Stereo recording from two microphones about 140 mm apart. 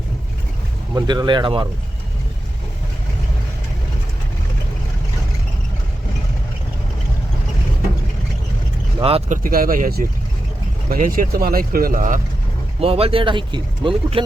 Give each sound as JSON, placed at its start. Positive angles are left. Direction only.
{"t": 0.9, "sound": "speech", "side_deg": -30}
{"t": 9.0, "sound": "speech", "side_deg": -45}
{"t": 9.3, "sound": "speech", "side_deg": -90}
{"t": 12.8, "sound": "speech", "side_deg": -45}